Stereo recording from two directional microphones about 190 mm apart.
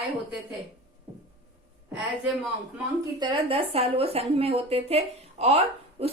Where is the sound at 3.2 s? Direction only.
25° right (ahead or behind).